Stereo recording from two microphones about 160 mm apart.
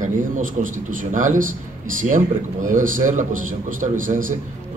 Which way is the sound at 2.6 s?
55° right (ahead or behind).